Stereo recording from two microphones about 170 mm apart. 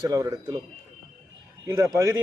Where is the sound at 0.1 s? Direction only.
20° right (ahead or behind).